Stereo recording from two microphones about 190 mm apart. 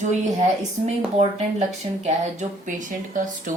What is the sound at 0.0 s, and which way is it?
Speech, 40° right (ahead or behind).